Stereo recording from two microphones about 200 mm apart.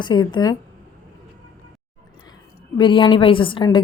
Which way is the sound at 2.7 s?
25° left (ahead or behind).